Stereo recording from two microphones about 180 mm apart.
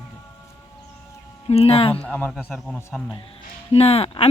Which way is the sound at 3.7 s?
35° left (ahead or behind).